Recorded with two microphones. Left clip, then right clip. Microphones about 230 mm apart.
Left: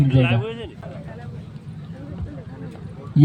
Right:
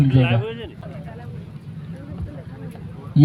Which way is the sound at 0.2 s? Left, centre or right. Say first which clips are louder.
Even; centre.